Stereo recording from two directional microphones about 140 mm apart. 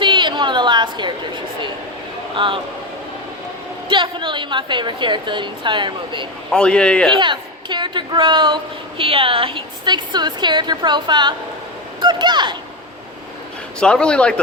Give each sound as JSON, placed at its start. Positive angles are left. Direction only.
{"t": 0.0, "sound": "a sound", "side_deg": -35}
{"t": 2.3, "sound": "a woman's voice", "side_deg": -35}
{"t": 3.8, "sound": "a woman's voice", "side_deg": -35}
{"t": 6.5, "sound": "a man's voice", "side_deg": 5}
{"t": 7.2, "sound": "a woman's voice", "side_deg": -35}
{"t": 13.7, "sound": "a man's voice", "side_deg": 5}